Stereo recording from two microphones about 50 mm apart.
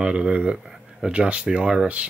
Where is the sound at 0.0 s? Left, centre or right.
Right.